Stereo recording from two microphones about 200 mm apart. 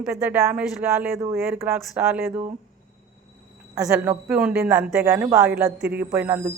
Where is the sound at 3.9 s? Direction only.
10° right (ahead or behind).